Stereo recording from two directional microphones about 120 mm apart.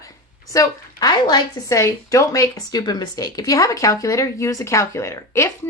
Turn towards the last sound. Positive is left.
turn(degrees=20)  # may be behind; listen again after turning